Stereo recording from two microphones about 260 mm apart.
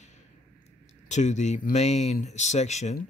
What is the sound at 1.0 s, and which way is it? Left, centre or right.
Speech, left.